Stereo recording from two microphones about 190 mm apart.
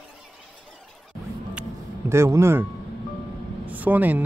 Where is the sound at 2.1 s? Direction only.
15° right (ahead or behind).